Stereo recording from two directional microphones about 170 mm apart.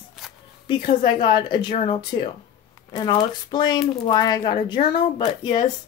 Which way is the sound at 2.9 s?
25° left (ahead or behind).